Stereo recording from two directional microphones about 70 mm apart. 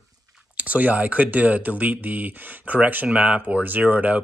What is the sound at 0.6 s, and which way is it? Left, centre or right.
Speech, right.